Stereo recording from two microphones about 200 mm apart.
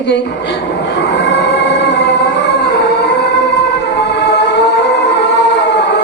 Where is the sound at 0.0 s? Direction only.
60° left (ahead or behind).